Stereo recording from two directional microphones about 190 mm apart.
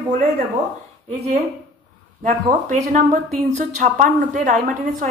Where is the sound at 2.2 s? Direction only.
45° right (ahead or behind).